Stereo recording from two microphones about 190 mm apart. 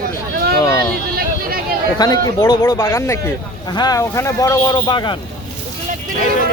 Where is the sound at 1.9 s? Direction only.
20° left (ahead or behind).